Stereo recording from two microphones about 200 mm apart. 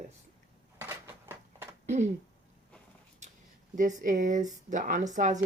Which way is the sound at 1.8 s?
35° right (ahead or behind).